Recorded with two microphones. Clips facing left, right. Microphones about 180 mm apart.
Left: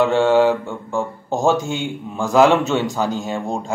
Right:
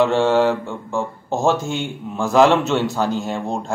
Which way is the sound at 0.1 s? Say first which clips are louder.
Left 2 dB; 15° left (ahead or behind).